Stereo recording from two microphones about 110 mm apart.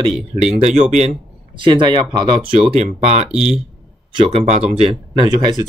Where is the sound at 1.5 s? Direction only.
50° right (ahead or behind).